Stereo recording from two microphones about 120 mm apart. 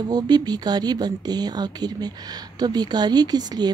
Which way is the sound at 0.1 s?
35° right (ahead or behind).